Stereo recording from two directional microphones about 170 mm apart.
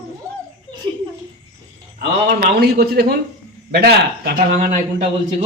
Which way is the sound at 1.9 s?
60° right (ahead or behind).